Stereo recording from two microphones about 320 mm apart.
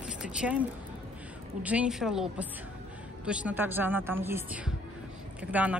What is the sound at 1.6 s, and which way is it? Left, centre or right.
Speech, centre.